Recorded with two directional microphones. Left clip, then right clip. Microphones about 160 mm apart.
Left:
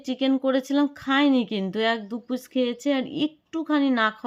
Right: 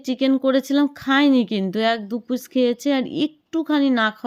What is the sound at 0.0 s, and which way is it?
Speech, 25° right (ahead or behind).